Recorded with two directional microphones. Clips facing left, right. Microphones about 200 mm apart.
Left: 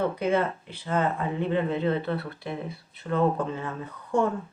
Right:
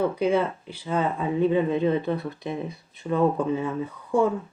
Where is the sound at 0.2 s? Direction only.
10° right (ahead or behind).